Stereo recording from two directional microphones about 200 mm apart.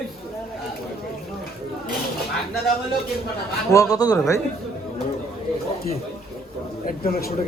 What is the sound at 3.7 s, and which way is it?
Speech, 15° left (ahead or behind).